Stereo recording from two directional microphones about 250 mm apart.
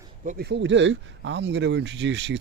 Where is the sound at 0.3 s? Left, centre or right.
Right.